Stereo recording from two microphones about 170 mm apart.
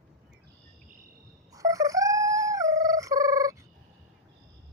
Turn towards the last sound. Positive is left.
turn(degrees=-20)  # may be behind; listen again after turning